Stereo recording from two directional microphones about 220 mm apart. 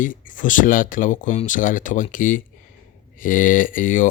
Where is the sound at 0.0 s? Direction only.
35° left (ahead or behind).